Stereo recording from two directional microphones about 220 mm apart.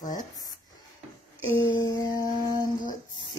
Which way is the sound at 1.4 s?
10° left (ahead or behind).